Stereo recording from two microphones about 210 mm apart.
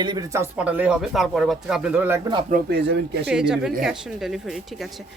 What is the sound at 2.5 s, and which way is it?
Speech, 50° right (ahead or behind).